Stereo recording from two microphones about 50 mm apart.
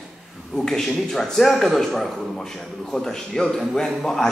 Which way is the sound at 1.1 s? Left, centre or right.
Centre.